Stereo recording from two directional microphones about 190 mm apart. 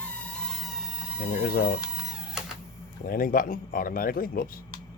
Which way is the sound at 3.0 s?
50° left (ahead or behind).